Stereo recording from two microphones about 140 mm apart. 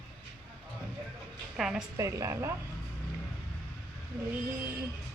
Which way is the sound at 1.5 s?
Centre (ahead or behind).